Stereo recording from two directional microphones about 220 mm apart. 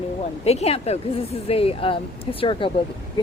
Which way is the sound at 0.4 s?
30° left (ahead or behind).